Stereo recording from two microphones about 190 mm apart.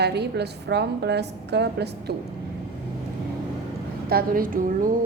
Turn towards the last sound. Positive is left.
turn(degrees=-45)  # may be behind; listen again after turning